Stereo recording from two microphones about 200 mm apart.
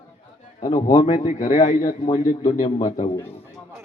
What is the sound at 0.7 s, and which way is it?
A man's voice, 25° left (ahead or behind).